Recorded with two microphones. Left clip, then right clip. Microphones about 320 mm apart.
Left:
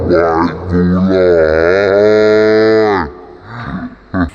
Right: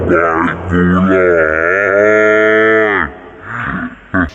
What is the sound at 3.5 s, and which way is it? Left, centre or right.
Roaring cats, centre.